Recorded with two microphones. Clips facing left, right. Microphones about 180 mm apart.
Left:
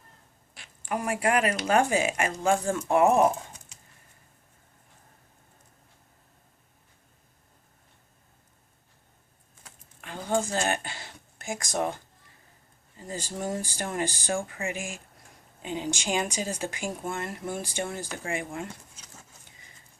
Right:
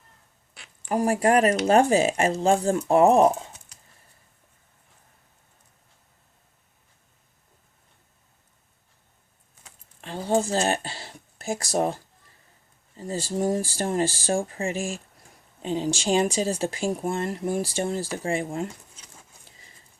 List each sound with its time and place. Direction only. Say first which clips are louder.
0.9 s speech: right 6 dB; 35° right (ahead or behind)
10.0 s speech: right 4 dB; 30° right (ahead or behind)
13.0 s speech: right 7 dB; 30° right (ahead or behind)